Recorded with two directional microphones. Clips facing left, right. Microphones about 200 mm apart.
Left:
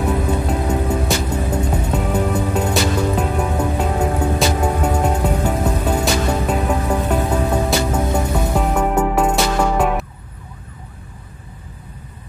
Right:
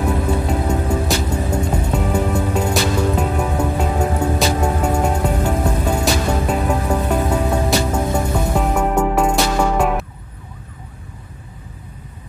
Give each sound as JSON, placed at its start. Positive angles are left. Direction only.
{"t": 0.0, "sound": "music", "side_deg": 5}